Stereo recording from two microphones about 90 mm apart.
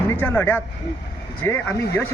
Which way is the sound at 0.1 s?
25° left (ahead or behind).